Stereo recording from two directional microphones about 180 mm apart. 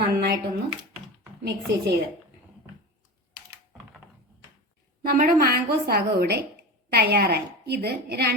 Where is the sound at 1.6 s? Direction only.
70° right (ahead or behind).